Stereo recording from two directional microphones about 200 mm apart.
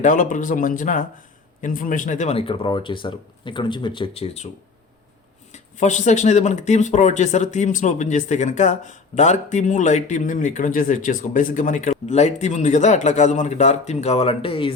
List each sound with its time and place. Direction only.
0.0 s speech: 40° left (ahead or behind)
5.8 s speech: 35° left (ahead or behind)